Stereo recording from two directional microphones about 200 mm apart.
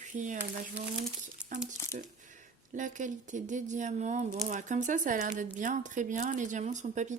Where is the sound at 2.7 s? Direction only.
40° right (ahead or behind).